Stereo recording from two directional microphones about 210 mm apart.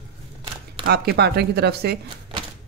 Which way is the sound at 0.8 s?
50° right (ahead or behind).